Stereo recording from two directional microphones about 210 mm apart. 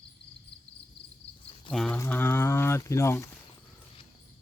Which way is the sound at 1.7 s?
5° left (ahead or behind).